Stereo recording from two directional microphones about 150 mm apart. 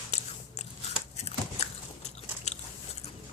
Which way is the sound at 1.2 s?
45° left (ahead or behind).